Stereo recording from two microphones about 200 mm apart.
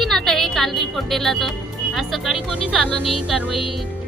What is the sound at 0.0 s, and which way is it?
Music, centre (ahead or behind).